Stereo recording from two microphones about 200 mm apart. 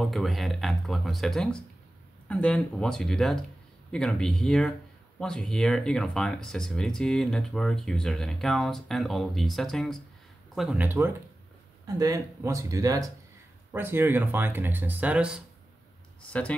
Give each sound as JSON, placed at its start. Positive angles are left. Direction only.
{"t": 0.0, "sound": "speech", "side_deg": 0}